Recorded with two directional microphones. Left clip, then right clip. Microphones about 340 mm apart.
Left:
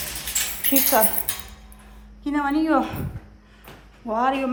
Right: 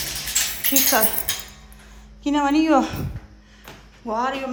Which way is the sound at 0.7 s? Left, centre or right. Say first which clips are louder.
Even; centre.